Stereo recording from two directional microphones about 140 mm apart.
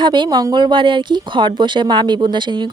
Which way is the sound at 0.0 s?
35° right (ahead or behind).